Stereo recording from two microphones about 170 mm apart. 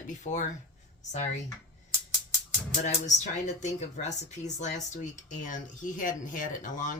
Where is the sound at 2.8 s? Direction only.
45° left (ahead or behind).